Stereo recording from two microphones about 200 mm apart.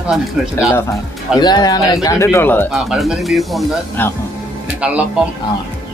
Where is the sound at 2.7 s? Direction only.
5° right (ahead or behind).